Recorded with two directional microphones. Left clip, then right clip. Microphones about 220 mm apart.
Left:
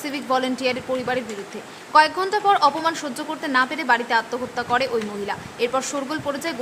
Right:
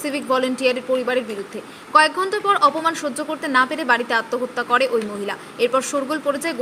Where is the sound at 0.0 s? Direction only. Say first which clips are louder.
Right 2 dB; 5° right (ahead or behind).